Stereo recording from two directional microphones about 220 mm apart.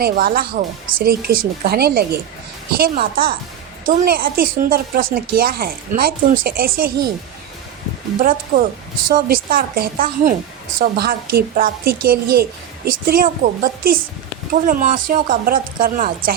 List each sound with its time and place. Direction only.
0.0 s a woman's voice: 45° right (ahead or behind)
8.2 s a woman's voice: 40° right (ahead or behind)